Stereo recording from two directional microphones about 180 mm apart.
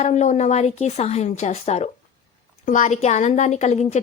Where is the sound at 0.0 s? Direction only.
40° left (ahead or behind).